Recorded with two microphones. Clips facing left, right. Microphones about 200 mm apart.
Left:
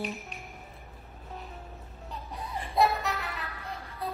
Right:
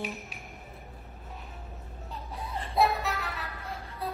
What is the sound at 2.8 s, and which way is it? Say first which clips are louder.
Music: even; centre (ahead or behind).